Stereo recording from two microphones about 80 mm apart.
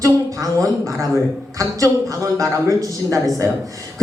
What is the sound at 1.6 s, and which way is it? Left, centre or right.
Speech, right.